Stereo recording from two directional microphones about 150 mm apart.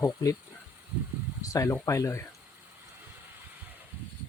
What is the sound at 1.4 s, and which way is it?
Speech, 20° left (ahead or behind).